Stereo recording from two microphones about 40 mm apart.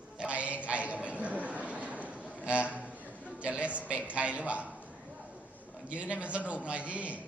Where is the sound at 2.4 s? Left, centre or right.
Right.